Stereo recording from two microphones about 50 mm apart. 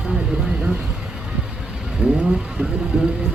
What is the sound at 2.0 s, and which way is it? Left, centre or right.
Speech, right.